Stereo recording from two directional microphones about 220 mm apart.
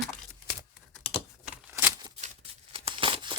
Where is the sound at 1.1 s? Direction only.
5° right (ahead or behind).